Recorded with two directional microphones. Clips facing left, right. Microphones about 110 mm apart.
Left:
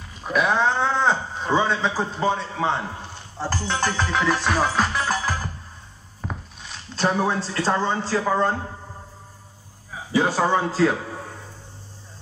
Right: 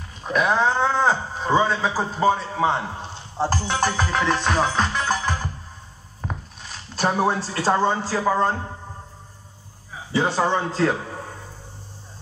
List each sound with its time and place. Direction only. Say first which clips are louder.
0.2 s speech: right 1 dB; centre (ahead or behind)
3.0 s speech: right 5 dB; 20° right (ahead or behind)
4.1 s music: even; centre (ahead or behind)
6.2 s speech: right 1 dB; centre (ahead or behind)
10.1 s a man's voice: left 1 dB; 5° left (ahead or behind)